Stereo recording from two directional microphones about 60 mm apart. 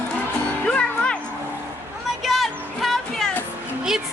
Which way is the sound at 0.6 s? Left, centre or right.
Centre.